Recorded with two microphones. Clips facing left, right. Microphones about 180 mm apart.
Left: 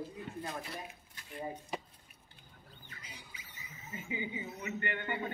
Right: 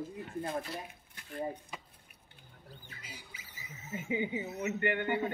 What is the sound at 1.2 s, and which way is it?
Speech, 55° right (ahead or behind).